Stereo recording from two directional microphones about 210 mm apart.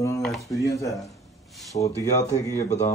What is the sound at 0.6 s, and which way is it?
Speech, 15° left (ahead or behind).